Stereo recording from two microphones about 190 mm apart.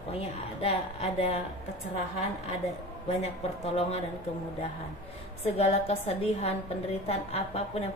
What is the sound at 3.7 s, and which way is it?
Speech, 35° left (ahead or behind).